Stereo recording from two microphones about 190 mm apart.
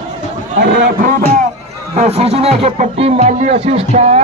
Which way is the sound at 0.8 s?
45° right (ahead or behind).